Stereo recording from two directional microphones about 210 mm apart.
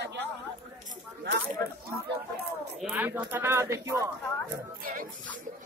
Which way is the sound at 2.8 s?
10° right (ahead or behind).